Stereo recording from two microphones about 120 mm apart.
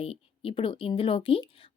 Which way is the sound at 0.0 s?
50° left (ahead or behind).